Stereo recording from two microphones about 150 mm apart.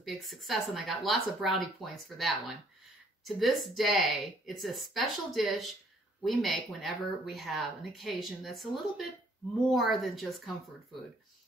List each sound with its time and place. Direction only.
0.0 s speech: centre (ahead or behind)